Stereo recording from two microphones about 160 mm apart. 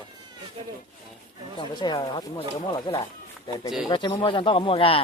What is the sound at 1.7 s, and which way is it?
Speech, 25° left (ahead or behind).